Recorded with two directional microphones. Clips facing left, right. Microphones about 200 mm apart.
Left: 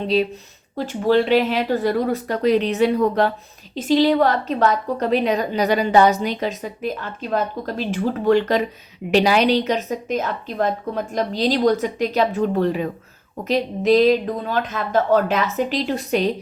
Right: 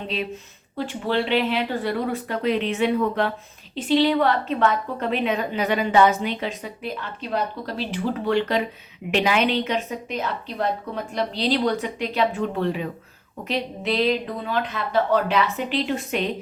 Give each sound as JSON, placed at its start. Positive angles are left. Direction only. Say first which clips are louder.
{"t": 0.1, "sound": "a woman's voice", "louder": "left 12 dB", "side_deg": 35}